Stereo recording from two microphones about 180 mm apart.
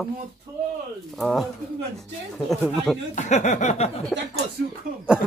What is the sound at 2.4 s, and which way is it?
Speech, centre (ahead or behind).